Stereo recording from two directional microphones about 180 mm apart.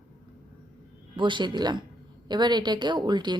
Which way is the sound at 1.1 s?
25° right (ahead or behind).